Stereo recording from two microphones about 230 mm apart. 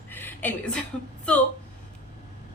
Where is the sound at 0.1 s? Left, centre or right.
Centre.